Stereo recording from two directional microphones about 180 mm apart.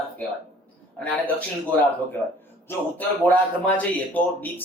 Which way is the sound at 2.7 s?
10° left (ahead or behind).